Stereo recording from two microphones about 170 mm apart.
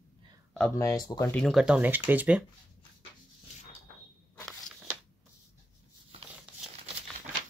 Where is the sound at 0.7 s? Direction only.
20° left (ahead or behind).